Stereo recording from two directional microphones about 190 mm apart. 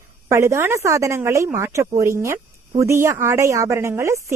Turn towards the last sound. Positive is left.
turn(degrees=-15)  # may be behind; listen again after turning